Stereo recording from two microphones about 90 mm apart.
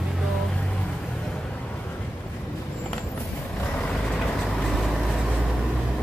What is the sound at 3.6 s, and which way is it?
Vehicle, 15° left (ahead or behind).